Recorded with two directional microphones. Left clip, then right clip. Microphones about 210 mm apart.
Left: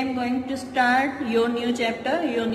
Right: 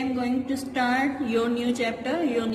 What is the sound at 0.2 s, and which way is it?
A woman's voice, 25° right (ahead or behind).